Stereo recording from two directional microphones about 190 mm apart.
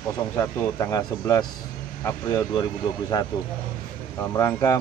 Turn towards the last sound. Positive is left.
turn(degrees=15)  # may be behind; listen again after turning